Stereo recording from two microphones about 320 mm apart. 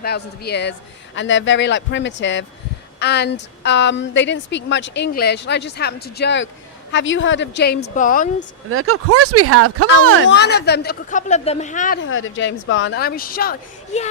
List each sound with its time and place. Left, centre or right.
0.0 s a woman's voice: left
8.7 s speech: right
10.2 s speech: left
11.9 s a woman's voice: left